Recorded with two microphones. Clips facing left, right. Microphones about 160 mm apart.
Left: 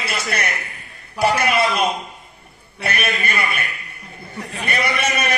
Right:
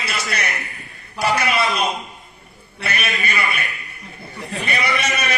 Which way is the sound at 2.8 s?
50° left (ahead or behind).